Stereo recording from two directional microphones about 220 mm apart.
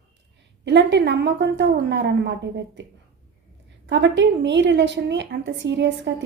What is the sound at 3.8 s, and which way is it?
A woman's voice, 55° right (ahead or behind).